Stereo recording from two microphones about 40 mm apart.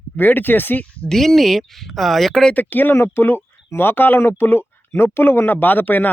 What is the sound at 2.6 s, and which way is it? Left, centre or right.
Speech, left.